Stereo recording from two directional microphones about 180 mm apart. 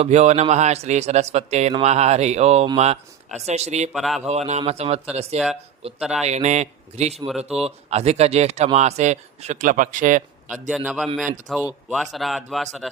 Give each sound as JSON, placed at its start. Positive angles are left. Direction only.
{"t": 0.0, "sound": "speech", "side_deg": -40}
{"t": 3.9, "sound": "speech", "side_deg": 0}
{"t": 4.3, "sound": "speech", "side_deg": -40}
{"t": 7.3, "sound": "speech", "side_deg": -5}
{"t": 7.6, "sound": "speech", "side_deg": -35}
{"t": 10.7, "sound": "speech", "side_deg": 0}